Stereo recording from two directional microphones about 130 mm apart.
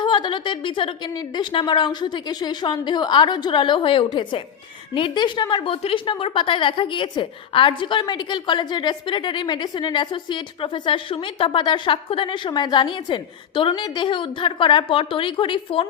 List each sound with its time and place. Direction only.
0.0 s a woman's voice: 35° left (ahead or behind)